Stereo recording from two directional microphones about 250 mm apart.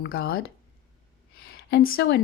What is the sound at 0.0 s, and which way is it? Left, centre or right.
Speech, left.